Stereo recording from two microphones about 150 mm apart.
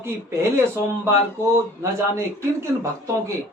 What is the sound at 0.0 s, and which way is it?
A man's voice, 15° right (ahead or behind).